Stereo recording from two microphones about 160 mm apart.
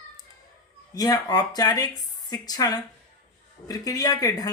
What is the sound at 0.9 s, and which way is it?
A woman's voice, 25° left (ahead or behind).